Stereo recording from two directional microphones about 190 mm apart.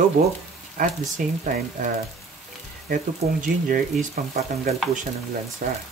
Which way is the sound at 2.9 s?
45° right (ahead or behind).